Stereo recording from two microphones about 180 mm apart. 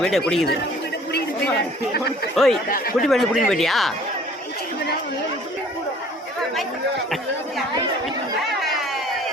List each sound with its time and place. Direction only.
0.0 s speech: 5° left (ahead or behind)
2.3 s speech: centre (ahead or behind)
2.6 s speech: 55° left (ahead or behind)
3.0 s speech: centre (ahead or behind)